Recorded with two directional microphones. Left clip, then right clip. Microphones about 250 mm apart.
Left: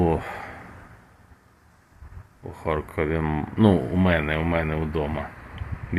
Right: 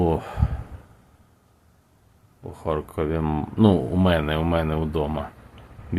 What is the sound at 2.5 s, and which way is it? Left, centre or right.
Speech, centre.